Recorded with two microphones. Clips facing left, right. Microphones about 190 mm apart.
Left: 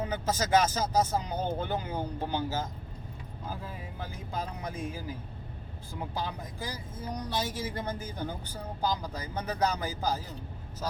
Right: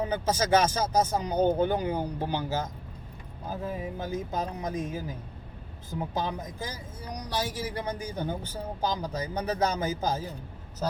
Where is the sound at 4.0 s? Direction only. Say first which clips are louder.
Right 3 dB; 20° right (ahead or behind).